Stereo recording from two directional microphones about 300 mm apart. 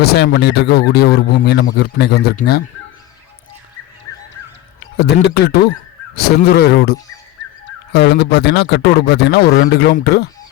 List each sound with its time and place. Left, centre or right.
0.0 s speech: left
4.1 s bird: centre
4.9 s speech: left